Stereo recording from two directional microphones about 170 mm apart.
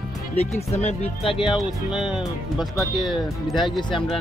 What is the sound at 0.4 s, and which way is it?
Speech, 40° left (ahead or behind).